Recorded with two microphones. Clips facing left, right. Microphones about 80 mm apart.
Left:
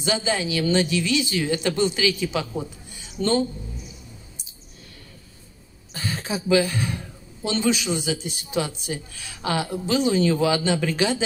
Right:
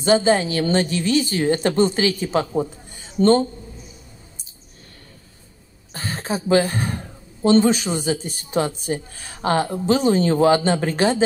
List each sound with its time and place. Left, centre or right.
0.0 s speech: right
5.9 s speech: right